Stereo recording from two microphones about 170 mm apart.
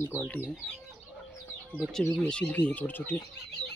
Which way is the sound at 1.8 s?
Centre (ahead or behind).